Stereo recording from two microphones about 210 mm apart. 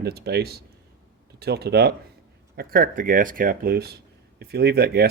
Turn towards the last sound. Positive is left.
turn(degrees=-50)  # may be behind; listen again after turning